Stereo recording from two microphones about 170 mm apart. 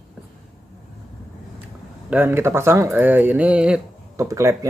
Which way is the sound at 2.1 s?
10° right (ahead or behind).